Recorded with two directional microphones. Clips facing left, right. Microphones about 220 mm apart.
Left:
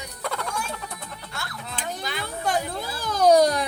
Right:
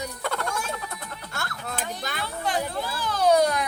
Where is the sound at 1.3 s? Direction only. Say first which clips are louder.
Right 3 dB; 50° right (ahead or behind).